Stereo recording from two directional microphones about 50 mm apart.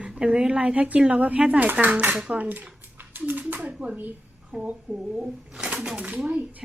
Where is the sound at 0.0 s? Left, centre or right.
Right.